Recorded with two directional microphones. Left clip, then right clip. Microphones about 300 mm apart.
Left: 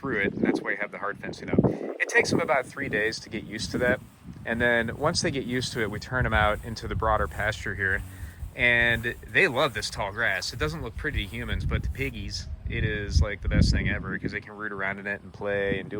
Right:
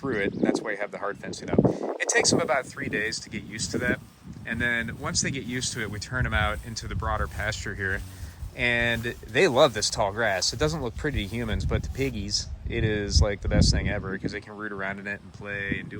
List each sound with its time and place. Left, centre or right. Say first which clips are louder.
0.0 s speech: even; centre